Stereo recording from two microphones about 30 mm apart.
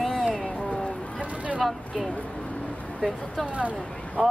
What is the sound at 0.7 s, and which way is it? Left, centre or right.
Vehicle, left.